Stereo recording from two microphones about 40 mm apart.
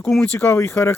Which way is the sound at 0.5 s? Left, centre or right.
Left.